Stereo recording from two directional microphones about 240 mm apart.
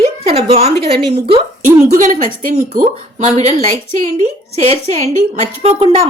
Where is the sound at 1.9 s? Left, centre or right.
Right.